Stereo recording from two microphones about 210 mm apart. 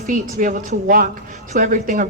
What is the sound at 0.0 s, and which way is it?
A woman's voice, 40° right (ahead or behind).